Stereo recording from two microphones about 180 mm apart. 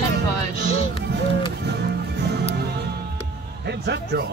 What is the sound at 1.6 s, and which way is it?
Music, 70° right (ahead or behind).